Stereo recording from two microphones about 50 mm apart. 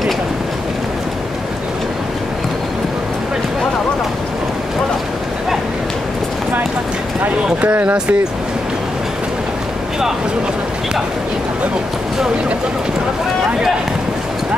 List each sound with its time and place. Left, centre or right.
7.6 s speech: right